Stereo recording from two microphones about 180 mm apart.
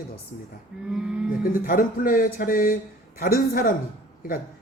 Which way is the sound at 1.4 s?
50° left (ahead or behind).